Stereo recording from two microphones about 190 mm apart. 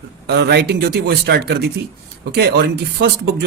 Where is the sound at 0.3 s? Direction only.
60° right (ahead or behind).